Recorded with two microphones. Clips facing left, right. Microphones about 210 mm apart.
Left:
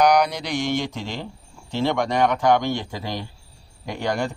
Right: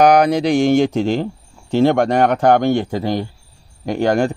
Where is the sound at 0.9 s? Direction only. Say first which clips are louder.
Right 13 dB; 50° right (ahead or behind).